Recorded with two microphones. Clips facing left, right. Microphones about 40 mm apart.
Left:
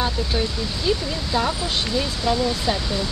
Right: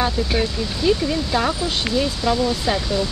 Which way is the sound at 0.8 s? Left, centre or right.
Centre.